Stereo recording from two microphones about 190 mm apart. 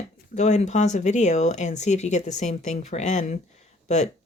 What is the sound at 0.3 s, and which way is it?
Speech, 40° left (ahead or behind).